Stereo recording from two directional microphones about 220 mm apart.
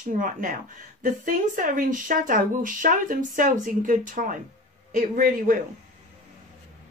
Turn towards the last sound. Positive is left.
turn(degrees=-40)  # may be behind; listen again after turning